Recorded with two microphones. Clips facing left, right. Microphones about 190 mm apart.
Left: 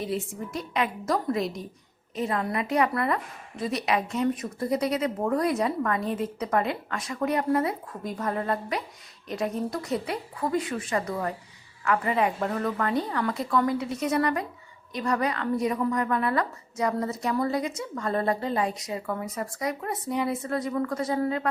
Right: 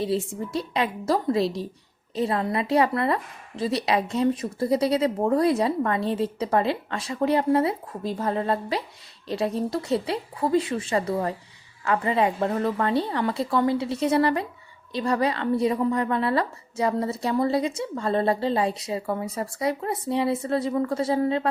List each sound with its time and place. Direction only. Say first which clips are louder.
0.0 s a woman's voice: right 5 dB; 30° right (ahead or behind)